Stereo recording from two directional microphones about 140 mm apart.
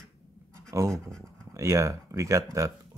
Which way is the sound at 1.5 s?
20° right (ahead or behind).